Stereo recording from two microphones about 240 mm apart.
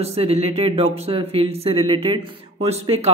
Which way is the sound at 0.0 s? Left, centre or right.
Right.